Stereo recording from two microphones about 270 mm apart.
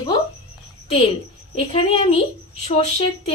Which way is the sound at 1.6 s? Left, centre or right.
Left.